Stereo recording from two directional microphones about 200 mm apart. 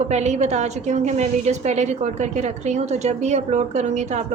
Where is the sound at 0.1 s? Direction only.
35° right (ahead or behind).